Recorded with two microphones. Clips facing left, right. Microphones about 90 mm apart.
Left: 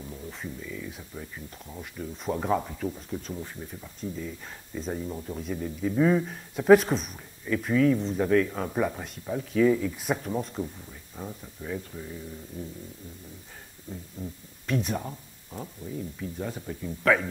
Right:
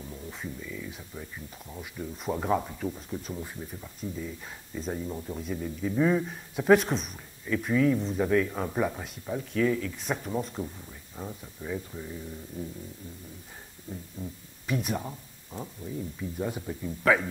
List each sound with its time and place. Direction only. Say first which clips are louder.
0.0 s speech: left 1 dB; centre (ahead or behind)
14.2 s speech: left 1 dB; 5° right (ahead or behind)